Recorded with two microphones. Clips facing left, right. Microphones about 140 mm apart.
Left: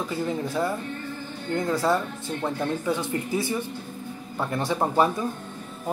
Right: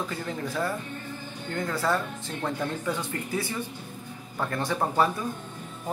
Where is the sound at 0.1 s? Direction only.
15° left (ahead or behind).